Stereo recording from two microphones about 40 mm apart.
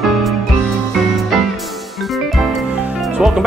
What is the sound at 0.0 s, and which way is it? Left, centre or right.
Music, centre.